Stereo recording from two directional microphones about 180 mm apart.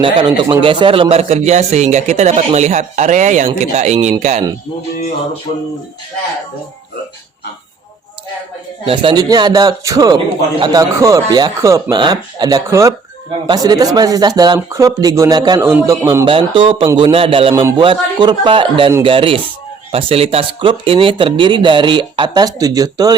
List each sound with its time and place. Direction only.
0.0 s a man's voice: 25° right (ahead or behind)
8.8 s speech: 30° right (ahead or behind)